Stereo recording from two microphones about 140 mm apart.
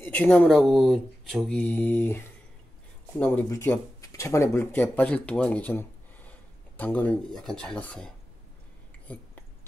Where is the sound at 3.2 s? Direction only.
15° left (ahead or behind).